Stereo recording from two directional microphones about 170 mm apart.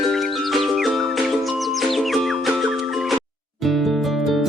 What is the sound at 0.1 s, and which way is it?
Music, centre (ahead or behind).